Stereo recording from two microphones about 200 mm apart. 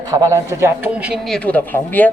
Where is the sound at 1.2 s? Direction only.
5° left (ahead or behind).